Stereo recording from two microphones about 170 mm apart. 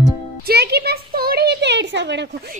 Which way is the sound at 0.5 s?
70° right (ahead or behind).